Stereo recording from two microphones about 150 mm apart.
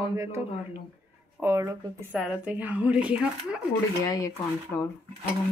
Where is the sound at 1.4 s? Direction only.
20° right (ahead or behind).